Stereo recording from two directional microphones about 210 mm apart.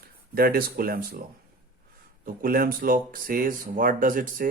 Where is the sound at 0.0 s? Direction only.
45° right (ahead or behind).